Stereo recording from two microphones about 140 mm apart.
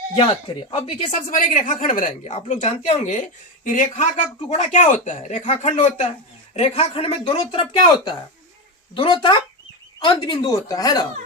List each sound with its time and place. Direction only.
0.7 s speech: 45° left (ahead or behind)
1.3 s a woman's voice: 65° left (ahead or behind)
4.4 s a woman's voice: 45° left (ahead or behind)
10.4 s speech: 25° left (ahead or behind)